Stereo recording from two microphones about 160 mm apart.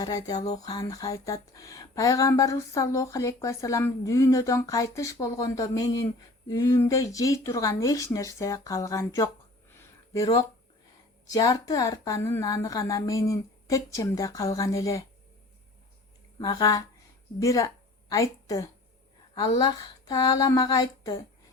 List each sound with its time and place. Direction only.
0.0 s speech: 25° left (ahead or behind)
16.4 s a woman's voice: 25° left (ahead or behind)